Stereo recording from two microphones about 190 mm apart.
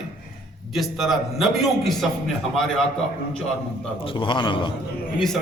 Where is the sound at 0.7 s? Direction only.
Centre (ahead or behind).